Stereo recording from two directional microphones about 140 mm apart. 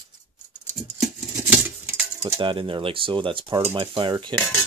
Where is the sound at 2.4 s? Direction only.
40° right (ahead or behind).